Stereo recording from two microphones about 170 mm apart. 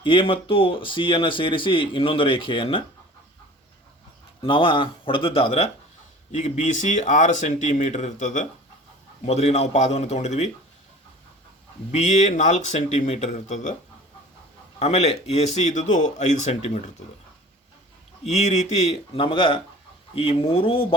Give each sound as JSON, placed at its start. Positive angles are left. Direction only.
{"t": 0.0, "sound": "speech", "side_deg": 30}
{"t": 4.4, "sound": "speech", "side_deg": 30}
{"t": 6.4, "sound": "speech", "side_deg": 45}
{"t": 11.9, "sound": "speech", "side_deg": 45}
{"t": 14.8, "sound": "speech", "side_deg": 35}
{"t": 18.3, "sound": "speech", "side_deg": 40}